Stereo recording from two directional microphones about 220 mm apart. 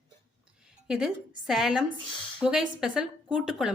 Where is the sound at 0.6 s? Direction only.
5° right (ahead or behind).